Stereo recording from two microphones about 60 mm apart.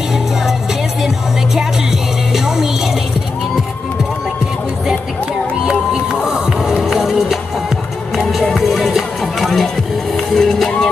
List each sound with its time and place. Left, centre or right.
2.3 s music: centre
6.2 s music: centre